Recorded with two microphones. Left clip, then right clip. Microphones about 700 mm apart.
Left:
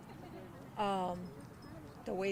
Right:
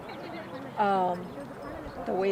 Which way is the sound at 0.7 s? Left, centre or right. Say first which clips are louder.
Right 10 dB; left.